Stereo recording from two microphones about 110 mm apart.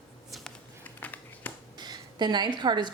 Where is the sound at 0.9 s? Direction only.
15° left (ahead or behind).